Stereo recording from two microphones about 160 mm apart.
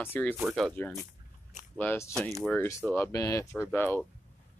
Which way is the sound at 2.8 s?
15° left (ahead or behind).